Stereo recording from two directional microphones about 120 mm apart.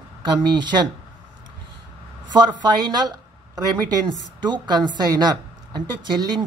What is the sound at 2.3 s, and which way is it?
A woman's voice, 35° right (ahead or behind).